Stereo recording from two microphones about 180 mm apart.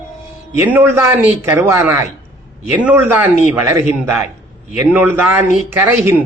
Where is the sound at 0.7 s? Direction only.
10° right (ahead or behind).